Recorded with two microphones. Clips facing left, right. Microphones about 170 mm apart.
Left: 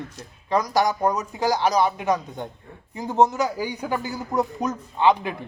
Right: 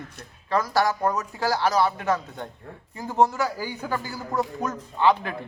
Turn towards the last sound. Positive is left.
turn(degrees=15)  # may be behind; listen again after turning